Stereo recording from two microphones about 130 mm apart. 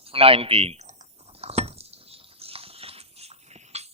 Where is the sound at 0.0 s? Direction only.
45° right (ahead or behind).